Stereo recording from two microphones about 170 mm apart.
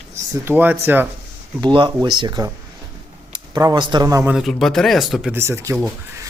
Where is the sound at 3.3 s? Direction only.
25° right (ahead or behind).